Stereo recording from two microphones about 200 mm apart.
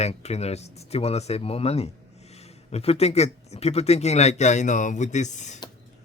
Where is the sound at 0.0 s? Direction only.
30° left (ahead or behind).